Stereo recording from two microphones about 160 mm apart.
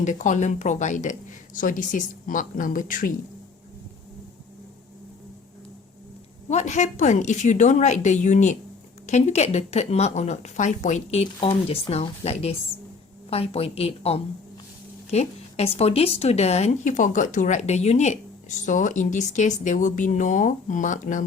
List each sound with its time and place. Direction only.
0.0 s speech: 50° left (ahead or behind)
6.5 s a woman's voice: 45° left (ahead or behind)